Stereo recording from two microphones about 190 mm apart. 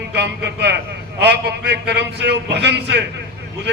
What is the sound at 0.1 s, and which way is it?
A man's voice, 65° right (ahead or behind).